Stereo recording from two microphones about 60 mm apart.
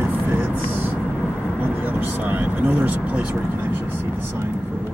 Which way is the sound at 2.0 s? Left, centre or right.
Right.